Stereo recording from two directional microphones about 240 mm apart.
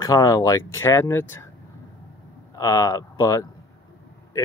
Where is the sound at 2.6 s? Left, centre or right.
Centre.